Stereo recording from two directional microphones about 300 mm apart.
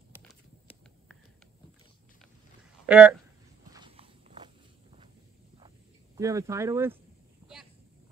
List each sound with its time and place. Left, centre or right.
2.9 s speech: centre
3.7 s walk: centre
6.1 s speech: centre